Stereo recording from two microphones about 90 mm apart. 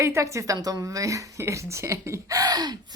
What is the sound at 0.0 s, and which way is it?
A woman's voice, 35° right (ahead or behind).